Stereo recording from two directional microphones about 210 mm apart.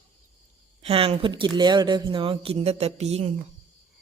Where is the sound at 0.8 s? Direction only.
25° right (ahead or behind).